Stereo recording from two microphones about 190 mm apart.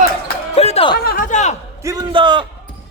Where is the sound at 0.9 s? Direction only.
50° left (ahead or behind).